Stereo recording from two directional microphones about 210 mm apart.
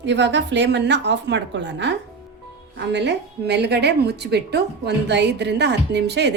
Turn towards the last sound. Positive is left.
turn(degrees=-55)  # may be behind; listen again after turning